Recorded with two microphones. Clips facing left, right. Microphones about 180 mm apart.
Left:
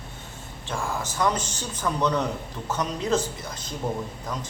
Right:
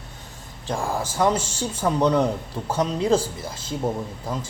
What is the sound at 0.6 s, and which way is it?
Speech, 35° right (ahead or behind).